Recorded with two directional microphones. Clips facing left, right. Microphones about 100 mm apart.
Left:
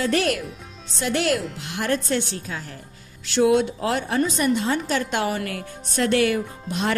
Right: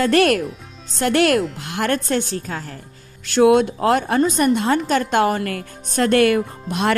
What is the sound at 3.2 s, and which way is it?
A woman's voice, 55° right (ahead or behind).